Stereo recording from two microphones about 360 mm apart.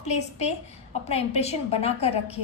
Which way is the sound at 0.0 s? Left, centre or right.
Centre.